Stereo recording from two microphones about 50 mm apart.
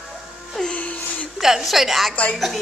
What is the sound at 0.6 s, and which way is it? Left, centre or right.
Music, centre.